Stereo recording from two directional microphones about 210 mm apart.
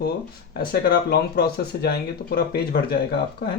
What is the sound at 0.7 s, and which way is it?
Speech, 50° left (ahead or behind).